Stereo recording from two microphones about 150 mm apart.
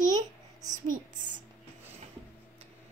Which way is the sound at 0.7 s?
60° right (ahead or behind).